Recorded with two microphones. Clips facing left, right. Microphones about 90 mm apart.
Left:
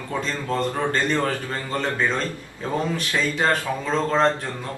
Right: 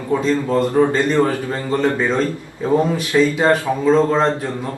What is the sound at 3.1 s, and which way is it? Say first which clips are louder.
A man's voice: right 8 dB; 15° right (ahead or behind).